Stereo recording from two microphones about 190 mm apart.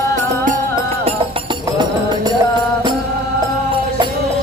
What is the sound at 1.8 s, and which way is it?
Music, 25° right (ahead or behind).